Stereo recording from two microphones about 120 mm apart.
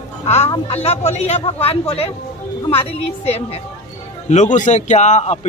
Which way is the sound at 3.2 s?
60° left (ahead or behind).